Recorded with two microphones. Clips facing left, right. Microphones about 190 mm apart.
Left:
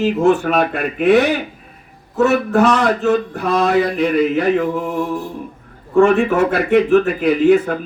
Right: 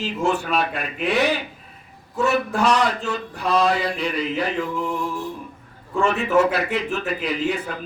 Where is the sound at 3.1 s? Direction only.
55° left (ahead or behind).